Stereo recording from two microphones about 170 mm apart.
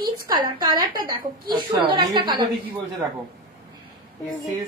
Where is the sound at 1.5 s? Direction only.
25° right (ahead or behind).